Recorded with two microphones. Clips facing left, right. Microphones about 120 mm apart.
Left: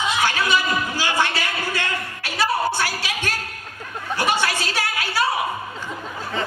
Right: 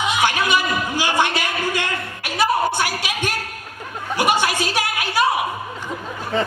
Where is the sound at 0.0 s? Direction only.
20° right (ahead or behind).